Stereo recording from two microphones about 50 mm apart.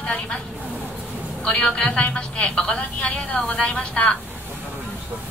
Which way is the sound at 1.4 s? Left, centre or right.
Centre.